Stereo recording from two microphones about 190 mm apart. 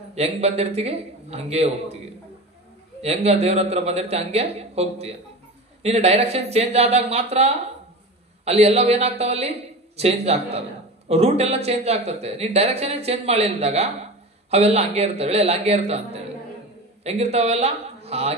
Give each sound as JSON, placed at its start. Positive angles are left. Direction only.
{"t": 0.1, "sound": "speech", "side_deg": -35}
{"t": 3.0, "sound": "a man's voice", "side_deg": -35}